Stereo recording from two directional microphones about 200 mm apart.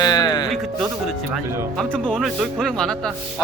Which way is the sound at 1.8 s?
5° left (ahead or behind).